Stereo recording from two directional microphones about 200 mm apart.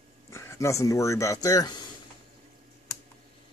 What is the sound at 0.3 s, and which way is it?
Speech, 15° left (ahead or behind).